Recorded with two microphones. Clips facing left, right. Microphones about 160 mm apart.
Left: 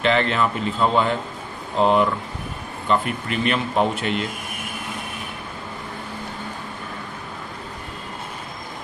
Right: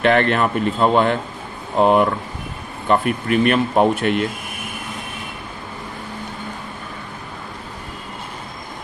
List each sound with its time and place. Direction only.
0.0 s a man's voice: 55° right (ahead or behind)